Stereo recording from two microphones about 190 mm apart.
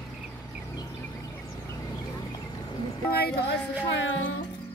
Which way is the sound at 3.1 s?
55° left (ahead or behind).